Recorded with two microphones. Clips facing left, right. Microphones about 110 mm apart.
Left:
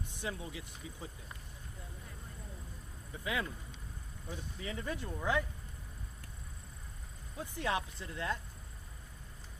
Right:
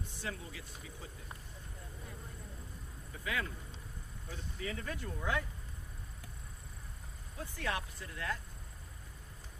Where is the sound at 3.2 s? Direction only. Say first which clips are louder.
Left 1 dB; 20° left (ahead or behind).